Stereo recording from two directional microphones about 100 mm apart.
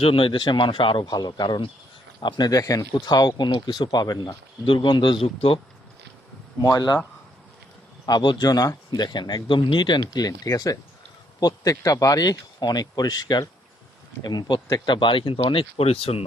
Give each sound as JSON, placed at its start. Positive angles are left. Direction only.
{"t": 0.0, "sound": "speech", "side_deg": 65}
{"t": 4.6, "sound": "speech", "side_deg": 55}
{"t": 5.2, "sound": "speech", "side_deg": 75}
{"t": 6.6, "sound": "speech", "side_deg": 40}
{"t": 8.0, "sound": "speech", "side_deg": 45}